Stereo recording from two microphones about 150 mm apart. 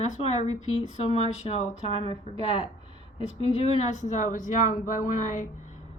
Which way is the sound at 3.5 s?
45° left (ahead or behind).